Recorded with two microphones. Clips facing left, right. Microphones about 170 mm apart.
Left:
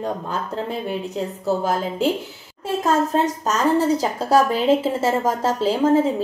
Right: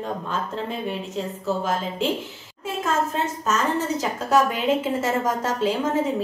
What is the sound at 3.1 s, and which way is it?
A woman's voice, 35° left (ahead or behind).